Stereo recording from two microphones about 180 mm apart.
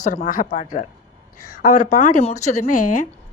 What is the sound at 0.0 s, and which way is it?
Speech, 45° left (ahead or behind).